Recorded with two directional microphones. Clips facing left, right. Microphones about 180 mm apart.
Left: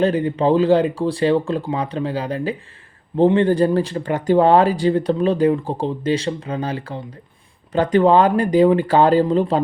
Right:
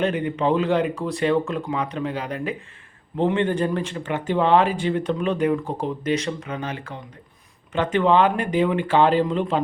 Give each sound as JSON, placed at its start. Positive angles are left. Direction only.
{"t": 0.0, "sound": "speech", "side_deg": 35}